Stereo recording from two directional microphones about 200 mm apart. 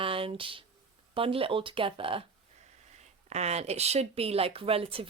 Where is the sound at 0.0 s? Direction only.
25° right (ahead or behind).